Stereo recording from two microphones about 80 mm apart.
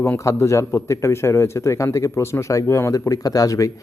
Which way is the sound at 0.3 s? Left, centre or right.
Left.